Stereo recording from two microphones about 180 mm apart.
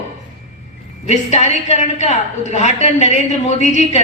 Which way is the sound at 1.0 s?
40° left (ahead or behind).